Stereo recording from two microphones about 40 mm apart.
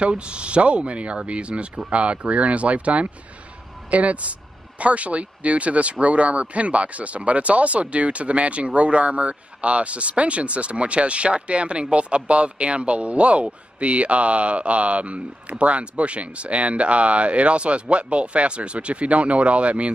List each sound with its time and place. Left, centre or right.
0.0 s speech: right